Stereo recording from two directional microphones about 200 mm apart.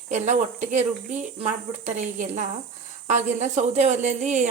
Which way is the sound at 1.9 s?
40° right (ahead or behind).